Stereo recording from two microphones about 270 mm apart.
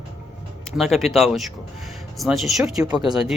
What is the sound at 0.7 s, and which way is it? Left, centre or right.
A man's voice, centre.